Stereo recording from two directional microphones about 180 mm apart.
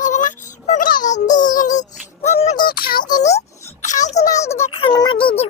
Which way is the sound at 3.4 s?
40° left (ahead or behind).